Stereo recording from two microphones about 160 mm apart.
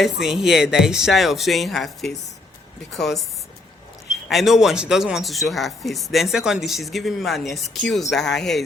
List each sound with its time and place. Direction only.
0.0 s speech: centre (ahead or behind)
4.3 s speech: centre (ahead or behind)